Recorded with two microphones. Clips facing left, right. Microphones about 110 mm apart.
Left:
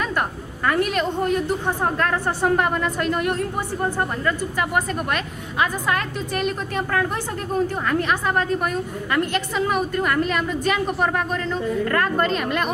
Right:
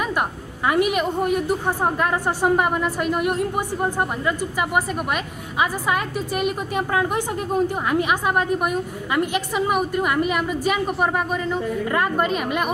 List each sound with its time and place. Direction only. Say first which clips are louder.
0.0 s a woman's voice: right 1 dB; 10° right (ahead or behind)